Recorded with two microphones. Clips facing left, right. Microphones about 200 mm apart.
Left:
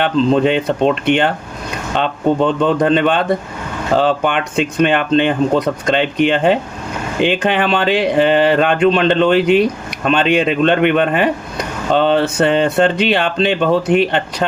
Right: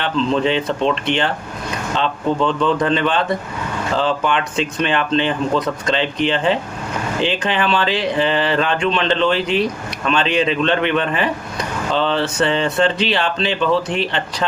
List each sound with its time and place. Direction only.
0.0 s speech: 40° left (ahead or behind)